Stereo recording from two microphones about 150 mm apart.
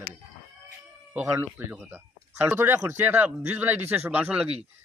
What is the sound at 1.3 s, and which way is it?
Speech, 15° right (ahead or behind).